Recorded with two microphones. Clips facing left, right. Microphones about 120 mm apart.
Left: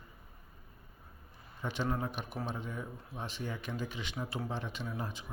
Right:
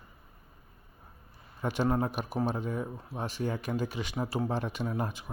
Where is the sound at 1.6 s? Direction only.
45° right (ahead or behind).